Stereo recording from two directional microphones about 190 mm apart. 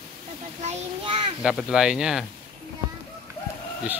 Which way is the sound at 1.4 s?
5° right (ahead or behind).